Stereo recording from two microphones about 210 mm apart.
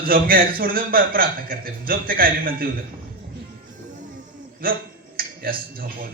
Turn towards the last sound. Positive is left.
turn(degrees=-45)  # may be behind; listen again after turning